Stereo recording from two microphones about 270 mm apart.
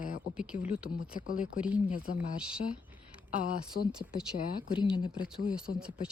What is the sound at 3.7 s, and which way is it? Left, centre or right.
Speech, left.